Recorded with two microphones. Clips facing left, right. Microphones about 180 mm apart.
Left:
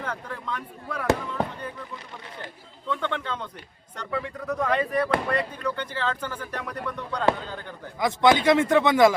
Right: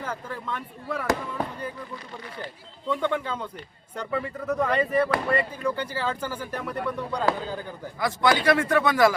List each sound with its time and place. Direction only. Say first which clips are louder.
0.0 s speech: even; 5° right (ahead or behind)
2.9 s speech: right 3 dB; 10° right (ahead or behind)
7.9 s a man's voice: left 3 dB; 20° left (ahead or behind)